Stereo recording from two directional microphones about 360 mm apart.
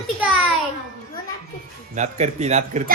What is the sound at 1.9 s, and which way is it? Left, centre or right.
Speech, centre.